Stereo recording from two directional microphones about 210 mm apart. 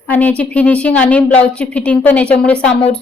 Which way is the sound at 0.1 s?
10° left (ahead or behind).